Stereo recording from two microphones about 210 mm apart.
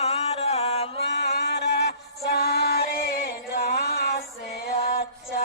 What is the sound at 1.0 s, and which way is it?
Music, 55° left (ahead or behind).